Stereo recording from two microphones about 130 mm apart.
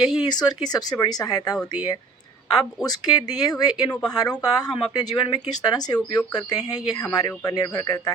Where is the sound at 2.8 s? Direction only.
30° left (ahead or behind).